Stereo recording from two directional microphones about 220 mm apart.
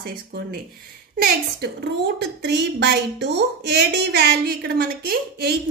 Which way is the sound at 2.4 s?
50° right (ahead or behind).